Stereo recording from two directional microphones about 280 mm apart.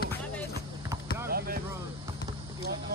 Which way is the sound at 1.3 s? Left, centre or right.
Right.